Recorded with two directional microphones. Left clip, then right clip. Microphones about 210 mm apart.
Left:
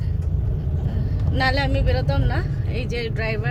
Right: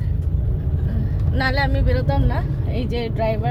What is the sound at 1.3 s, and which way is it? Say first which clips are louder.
Speech: even; 15° left (ahead or behind).